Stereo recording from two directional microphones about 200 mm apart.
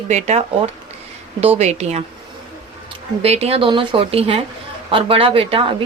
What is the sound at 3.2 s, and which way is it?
A woman's voice, 30° right (ahead or behind).